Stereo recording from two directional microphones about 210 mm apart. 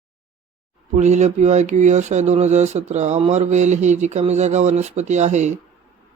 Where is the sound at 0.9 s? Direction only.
35° right (ahead or behind).